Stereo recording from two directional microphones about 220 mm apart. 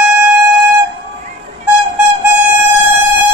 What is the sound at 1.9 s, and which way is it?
Vehicle, 10° right (ahead or behind).